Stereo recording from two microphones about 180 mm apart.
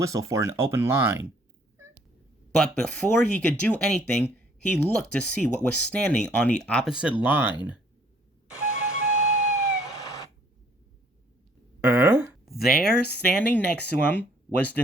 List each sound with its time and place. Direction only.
0.0 s speech: 20° right (ahead or behind)
2.6 s speech: 5° left (ahead or behind)
7.2 s speech: 10° right (ahead or behind)
8.8 s music: 45° right (ahead or behind)
11.8 s a sound: 10° right (ahead or behind)
12.5 s speech: centre (ahead or behind)